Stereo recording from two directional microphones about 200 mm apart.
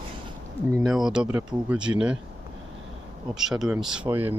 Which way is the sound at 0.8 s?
Centre (ahead or behind).